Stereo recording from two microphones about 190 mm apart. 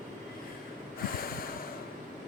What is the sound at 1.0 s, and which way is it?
Snort, 50° left (ahead or behind).